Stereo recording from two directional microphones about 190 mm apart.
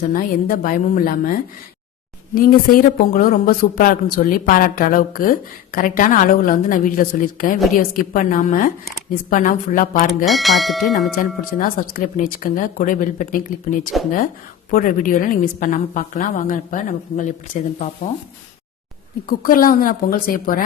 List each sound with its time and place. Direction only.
0.1 s speech: 45° left (ahead or behind)
10.2 s speech: centre (ahead or behind)
11.2 s speech: 45° left (ahead or behind)
19.4 s speech: 50° left (ahead or behind)